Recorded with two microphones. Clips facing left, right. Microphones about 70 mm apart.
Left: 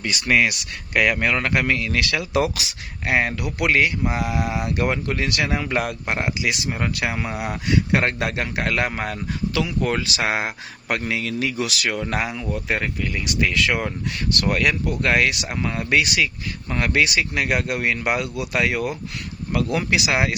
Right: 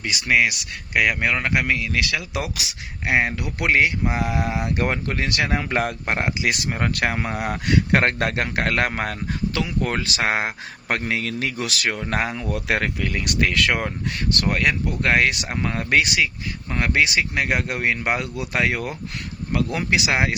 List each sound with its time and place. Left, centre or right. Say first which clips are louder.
0.0 s speech: even; centre
3.1 s speech: even; centre
12.1 s speech: right 1 dB; right
12.5 s speech: right 2 dB; right
13.1 s speech: even; right
14.4 s speech: left 1 dB; right
16.1 s speech: even; right